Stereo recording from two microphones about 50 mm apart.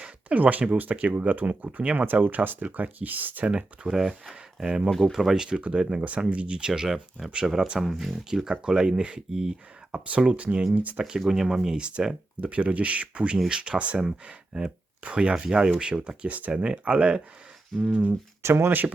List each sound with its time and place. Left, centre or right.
0.0 s a sound: right
0.8 s speech: right
2.2 s speech: right
3.9 s speech: centre
4.9 s speech: centre
5.1 s speech: centre
5.5 s speech: right
9.3 s speech: centre
9.9 s speech: right
11.2 s speech: centre
11.8 s speech: right
17.7 s a sound: centre
18.4 s speech: right